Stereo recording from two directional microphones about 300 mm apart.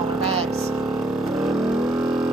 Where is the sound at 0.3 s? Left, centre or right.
Right.